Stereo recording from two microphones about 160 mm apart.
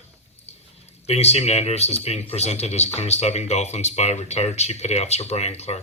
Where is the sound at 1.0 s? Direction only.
40° left (ahead or behind).